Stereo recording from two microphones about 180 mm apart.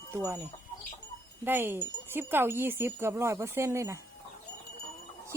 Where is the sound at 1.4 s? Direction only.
10° right (ahead or behind).